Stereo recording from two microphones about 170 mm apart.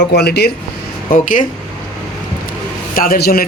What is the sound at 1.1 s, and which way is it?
Speech, 50° left (ahead or behind).